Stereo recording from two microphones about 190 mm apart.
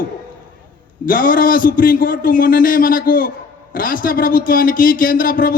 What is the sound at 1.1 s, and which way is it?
A man's voice, 50° left (ahead or behind).